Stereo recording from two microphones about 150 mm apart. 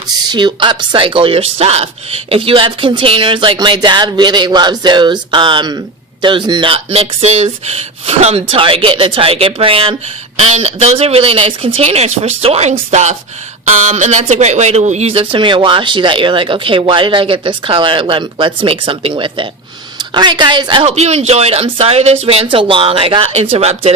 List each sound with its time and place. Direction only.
0.1 s speech: 30° right (ahead or behind)